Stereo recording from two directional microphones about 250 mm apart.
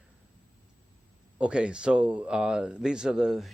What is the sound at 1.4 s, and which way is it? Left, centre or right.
Speech, centre.